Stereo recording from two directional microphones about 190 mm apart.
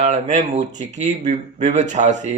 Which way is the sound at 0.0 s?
35° right (ahead or behind).